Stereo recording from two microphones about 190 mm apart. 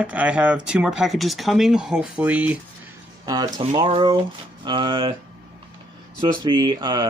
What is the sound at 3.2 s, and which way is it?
Speech, 20° right (ahead or behind).